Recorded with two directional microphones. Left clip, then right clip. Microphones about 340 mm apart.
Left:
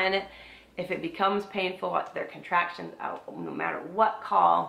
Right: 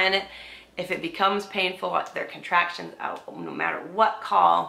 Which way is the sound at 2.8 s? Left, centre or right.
Centre.